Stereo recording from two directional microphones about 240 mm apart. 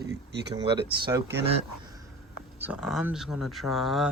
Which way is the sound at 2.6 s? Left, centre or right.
Centre.